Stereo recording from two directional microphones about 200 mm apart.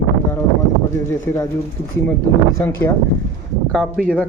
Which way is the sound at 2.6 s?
15° left (ahead or behind).